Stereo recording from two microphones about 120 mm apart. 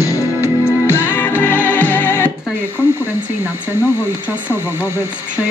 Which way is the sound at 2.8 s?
20° right (ahead or behind).